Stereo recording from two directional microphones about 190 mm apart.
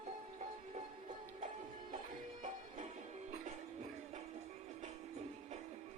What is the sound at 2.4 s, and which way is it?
Music, 40° right (ahead or behind).